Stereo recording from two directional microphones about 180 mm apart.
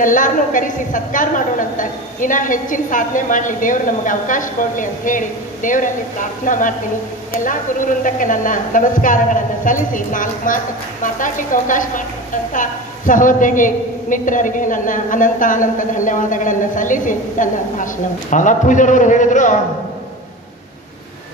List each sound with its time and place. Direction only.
0.0 s a woman's voice: 45° left (ahead or behind)